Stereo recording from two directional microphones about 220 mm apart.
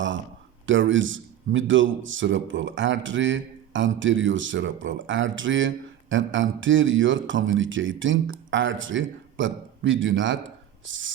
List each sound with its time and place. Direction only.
0.6 s a man's voice: 60° right (ahead or behind)